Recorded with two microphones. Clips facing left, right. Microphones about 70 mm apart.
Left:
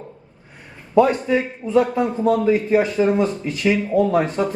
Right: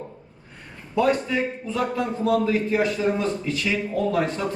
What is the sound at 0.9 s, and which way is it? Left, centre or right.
A man's voice, left.